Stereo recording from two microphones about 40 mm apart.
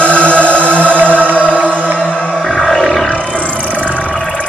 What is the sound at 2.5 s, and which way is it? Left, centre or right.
Roar, centre.